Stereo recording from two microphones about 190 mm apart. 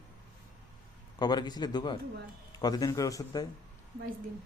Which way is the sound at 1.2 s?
20° left (ahead or behind).